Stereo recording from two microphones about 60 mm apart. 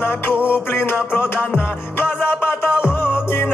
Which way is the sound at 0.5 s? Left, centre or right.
Left.